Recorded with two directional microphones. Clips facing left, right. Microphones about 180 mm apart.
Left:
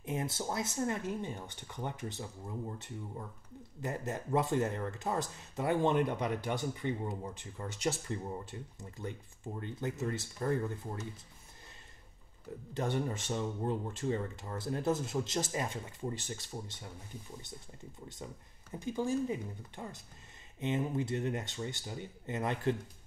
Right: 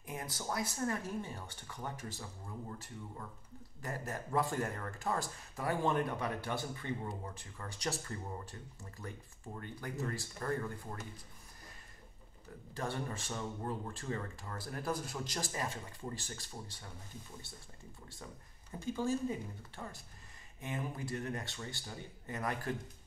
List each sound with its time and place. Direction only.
0.0 s speech: 25° left (ahead or behind)
12.7 s speech: 20° left (ahead or behind)
18.0 s speech: 20° left (ahead or behind)